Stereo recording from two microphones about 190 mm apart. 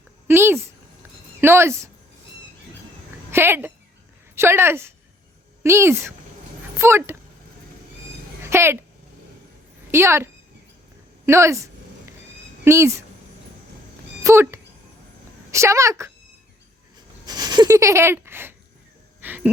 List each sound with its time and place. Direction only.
0.3 s speech: 10° right (ahead or behind)
3.2 s a woman's voice: 10° right (ahead or behind)
8.4 s speech: 15° right (ahead or behind)
9.9 s speech: 15° right (ahead or behind)
11.3 s a sound: 15° right (ahead or behind)
12.6 s speech: 15° right (ahead or behind)
14.3 s speech: 15° right (ahead or behind)
17.2 s speech: 20° right (ahead or behind)
19.2 s wheeze: 10° right (ahead or behind)